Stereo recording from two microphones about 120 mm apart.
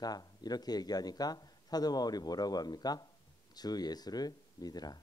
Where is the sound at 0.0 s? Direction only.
35° left (ahead or behind).